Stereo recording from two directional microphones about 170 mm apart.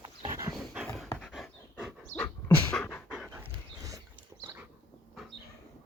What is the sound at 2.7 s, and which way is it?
Pant, 10° left (ahead or behind).